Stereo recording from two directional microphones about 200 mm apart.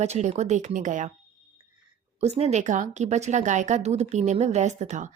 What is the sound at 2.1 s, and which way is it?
Speech, 30° right (ahead or behind).